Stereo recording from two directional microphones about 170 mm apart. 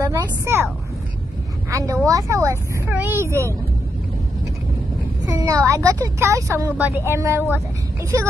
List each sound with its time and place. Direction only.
0.0 s speech: 20° right (ahead or behind)
1.7 s a woman's voice: 20° right (ahead or behind)
5.2 s speech: 20° right (ahead or behind)